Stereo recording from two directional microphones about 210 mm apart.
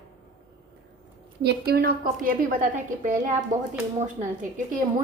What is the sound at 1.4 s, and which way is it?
A woman's voice, 50° right (ahead or behind).